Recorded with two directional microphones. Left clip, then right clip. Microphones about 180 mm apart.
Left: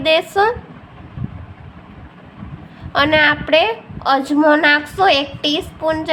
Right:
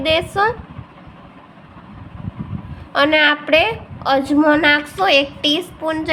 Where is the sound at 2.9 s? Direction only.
Centre (ahead or behind).